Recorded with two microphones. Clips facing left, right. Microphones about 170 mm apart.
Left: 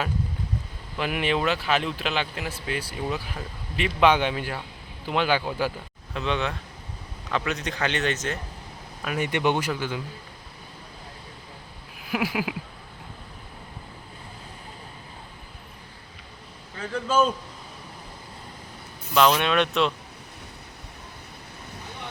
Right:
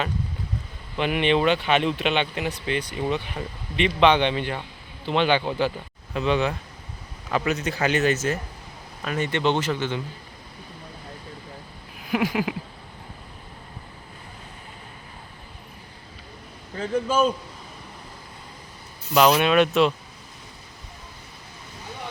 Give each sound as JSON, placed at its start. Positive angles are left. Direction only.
{"t": 0.9, "sound": "speech", "side_deg": 0}
{"t": 9.0, "sound": "speech", "side_deg": 10}
{"t": 12.0, "sound": "speech", "side_deg": 5}
{"t": 16.7, "sound": "a man's voice", "side_deg": -25}
{"t": 19.1, "sound": "speech", "side_deg": -5}